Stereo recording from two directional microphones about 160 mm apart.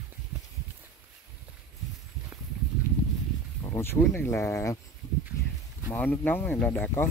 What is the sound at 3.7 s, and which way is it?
Speech, 15° left (ahead or behind).